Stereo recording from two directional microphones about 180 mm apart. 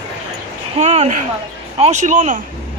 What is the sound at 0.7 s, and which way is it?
A man's voice, 40° right (ahead or behind).